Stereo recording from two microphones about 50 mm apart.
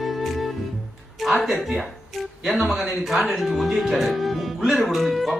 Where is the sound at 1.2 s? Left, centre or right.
Centre.